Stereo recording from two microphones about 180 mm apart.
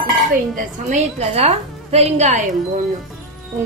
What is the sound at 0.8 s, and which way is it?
A woman's voice, 35° right (ahead or behind).